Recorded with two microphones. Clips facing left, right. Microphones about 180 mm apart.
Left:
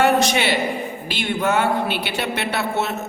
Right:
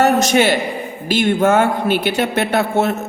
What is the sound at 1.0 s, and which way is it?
A woman's voice, 45° right (ahead or behind).